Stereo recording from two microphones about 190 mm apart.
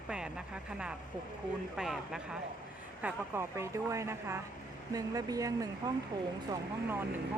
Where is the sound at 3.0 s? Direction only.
15° right (ahead or behind).